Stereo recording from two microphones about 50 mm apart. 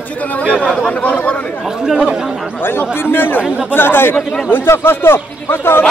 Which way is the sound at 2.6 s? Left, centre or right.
Left.